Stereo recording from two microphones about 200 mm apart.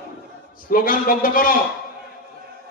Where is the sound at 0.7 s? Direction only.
45° left (ahead or behind).